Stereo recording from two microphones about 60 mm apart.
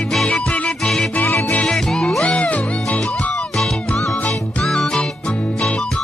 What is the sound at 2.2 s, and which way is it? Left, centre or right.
Music, left.